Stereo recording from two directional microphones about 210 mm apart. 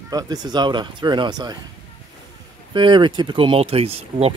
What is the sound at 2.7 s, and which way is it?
Speech, 20° right (ahead or behind).